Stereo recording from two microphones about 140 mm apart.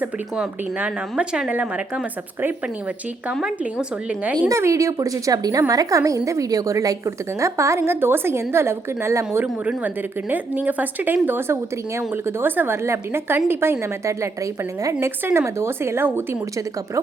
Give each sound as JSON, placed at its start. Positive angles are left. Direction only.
{"t": 0.0, "sound": "speech", "side_deg": -10}
{"t": 3.4, "sound": "speech", "side_deg": -10}
{"t": 4.4, "sound": "a woman's voice", "side_deg": -20}